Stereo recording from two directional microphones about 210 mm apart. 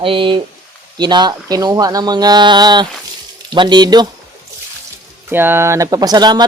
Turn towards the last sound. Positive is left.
turn(degrees=-20)  # may be behind; listen again after turning